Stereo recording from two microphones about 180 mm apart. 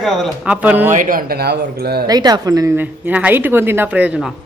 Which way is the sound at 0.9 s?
50° right (ahead or behind).